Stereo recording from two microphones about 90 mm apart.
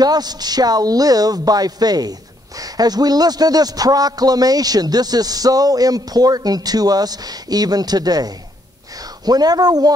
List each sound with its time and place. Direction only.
0.0 s speech: 50° right (ahead or behind)